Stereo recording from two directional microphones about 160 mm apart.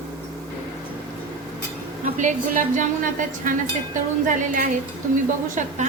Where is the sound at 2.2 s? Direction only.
55° right (ahead or behind).